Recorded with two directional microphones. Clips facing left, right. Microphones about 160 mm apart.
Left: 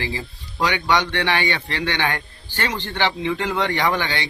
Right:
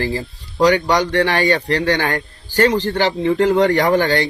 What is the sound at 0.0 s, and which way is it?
Speech, 40° right (ahead or behind).